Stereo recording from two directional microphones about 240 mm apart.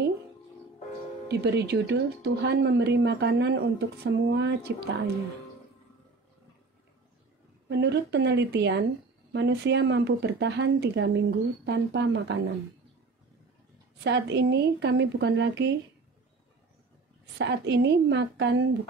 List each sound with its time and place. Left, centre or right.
1.3 s speech: right
7.6 s speech: right
14.0 s speech: right
17.4 s speech: right